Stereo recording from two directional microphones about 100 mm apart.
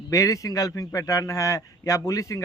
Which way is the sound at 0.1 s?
35° left (ahead or behind).